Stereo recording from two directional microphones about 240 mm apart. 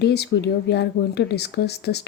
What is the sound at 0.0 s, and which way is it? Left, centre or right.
Speech, left.